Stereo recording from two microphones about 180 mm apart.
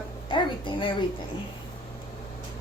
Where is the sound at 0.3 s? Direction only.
25° left (ahead or behind).